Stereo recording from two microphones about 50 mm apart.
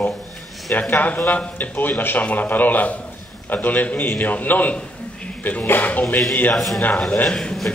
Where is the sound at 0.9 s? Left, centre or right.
Left.